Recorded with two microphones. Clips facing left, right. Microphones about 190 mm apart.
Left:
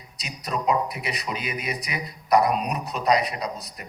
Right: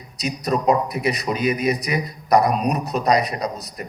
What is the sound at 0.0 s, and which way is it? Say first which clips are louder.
A man's voice: right 11 dB; 40° right (ahead or behind).